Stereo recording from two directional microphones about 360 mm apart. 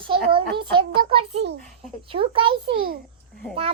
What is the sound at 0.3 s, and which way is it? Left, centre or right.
Child singing, centre.